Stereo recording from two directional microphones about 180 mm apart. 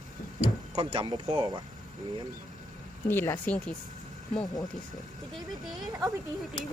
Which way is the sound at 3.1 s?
15° left (ahead or behind).